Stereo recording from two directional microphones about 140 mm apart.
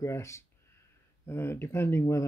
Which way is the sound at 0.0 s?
20° left (ahead or behind).